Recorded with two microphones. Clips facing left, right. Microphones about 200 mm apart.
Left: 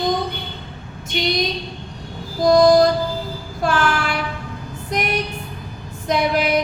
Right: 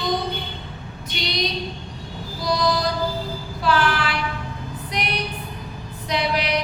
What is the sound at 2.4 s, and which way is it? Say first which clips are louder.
Music: left 11 dB; 45° left (ahead or behind).